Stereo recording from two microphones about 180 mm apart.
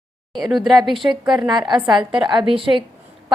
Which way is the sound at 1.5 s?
25° right (ahead or behind).